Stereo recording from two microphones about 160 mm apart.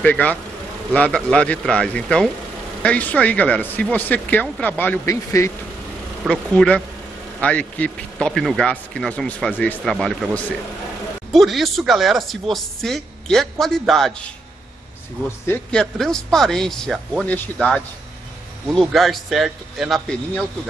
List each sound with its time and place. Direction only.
0.0 s speech: 10° left (ahead or behind)
6.2 s speech: 5° left (ahead or behind)
15.4 s speech: 5° left (ahead or behind)